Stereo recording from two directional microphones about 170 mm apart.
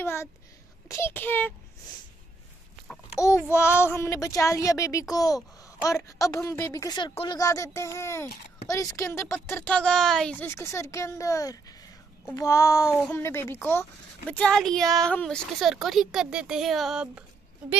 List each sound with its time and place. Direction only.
0.0 s a sound: 15° left (ahead or behind)
0.8 s speech: 15° left (ahead or behind)
3.2 s a woman's voice: 15° left (ahead or behind); by 17.2 s 5° right (ahead or behind)